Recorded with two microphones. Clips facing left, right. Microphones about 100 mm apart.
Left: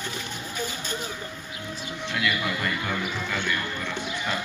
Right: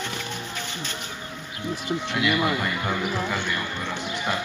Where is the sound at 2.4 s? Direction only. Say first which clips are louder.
Right 4 dB; 15° right (ahead or behind).